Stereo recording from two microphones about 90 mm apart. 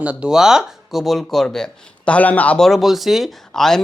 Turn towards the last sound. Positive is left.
turn(degrees=5)  # may be behind; listen again after turning